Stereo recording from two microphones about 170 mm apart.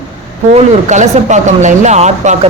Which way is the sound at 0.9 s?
45° right (ahead or behind).